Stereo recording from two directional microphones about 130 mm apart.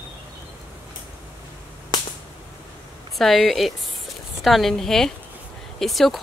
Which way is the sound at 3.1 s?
Centre (ahead or behind).